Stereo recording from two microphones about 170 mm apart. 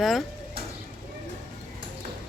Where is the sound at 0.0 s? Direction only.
Centre (ahead or behind).